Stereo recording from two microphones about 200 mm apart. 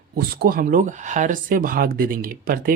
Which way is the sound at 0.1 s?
50° right (ahead or behind).